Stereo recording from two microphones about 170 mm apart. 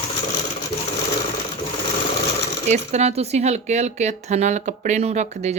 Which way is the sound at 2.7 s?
40° right (ahead or behind).